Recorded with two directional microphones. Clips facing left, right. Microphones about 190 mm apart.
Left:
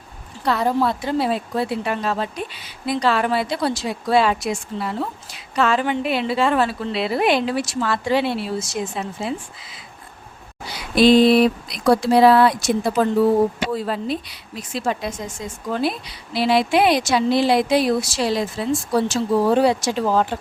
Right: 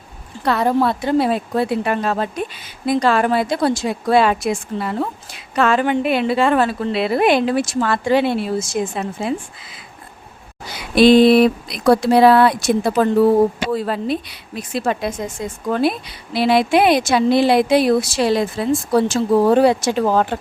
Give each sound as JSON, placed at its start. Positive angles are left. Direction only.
{"t": 0.4, "sound": "a woman's voice", "side_deg": -60}
{"t": 10.9, "sound": "a woman's voice", "side_deg": -60}